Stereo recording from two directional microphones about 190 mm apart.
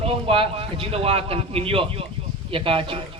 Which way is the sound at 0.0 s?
30° right (ahead or behind).